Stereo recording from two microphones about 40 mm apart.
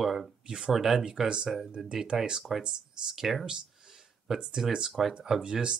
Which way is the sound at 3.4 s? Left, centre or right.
Centre.